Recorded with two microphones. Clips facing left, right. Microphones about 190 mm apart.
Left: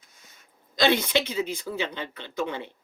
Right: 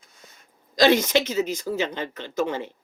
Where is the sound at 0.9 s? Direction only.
45° right (ahead or behind).